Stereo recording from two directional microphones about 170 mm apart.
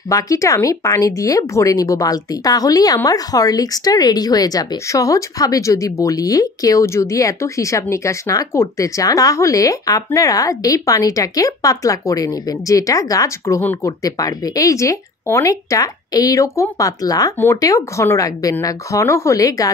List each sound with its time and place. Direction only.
0.1 s speech: 20° left (ahead or behind)